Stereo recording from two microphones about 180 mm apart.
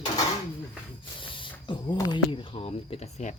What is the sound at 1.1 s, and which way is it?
Speech, 30° left (ahead or behind).